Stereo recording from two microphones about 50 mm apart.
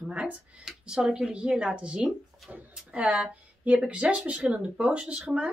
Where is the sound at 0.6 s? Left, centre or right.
Centre; by 2.6 s right.